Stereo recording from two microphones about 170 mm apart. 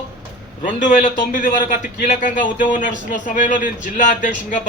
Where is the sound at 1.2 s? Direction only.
55° left (ahead or behind).